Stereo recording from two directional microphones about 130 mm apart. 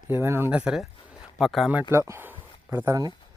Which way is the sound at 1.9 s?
20° right (ahead or behind).